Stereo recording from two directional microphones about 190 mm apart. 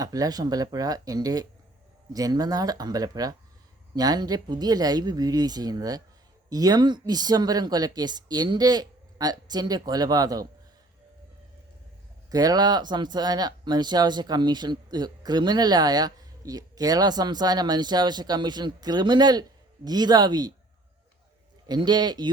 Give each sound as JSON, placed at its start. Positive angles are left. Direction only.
{"t": 0.0, "sound": "speech", "side_deg": -20}
{"t": 12.3, "sound": "speech", "side_deg": -20}
{"t": 21.7, "sound": "speech", "side_deg": -20}